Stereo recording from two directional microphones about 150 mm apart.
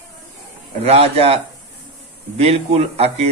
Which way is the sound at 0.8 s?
40° right (ahead or behind).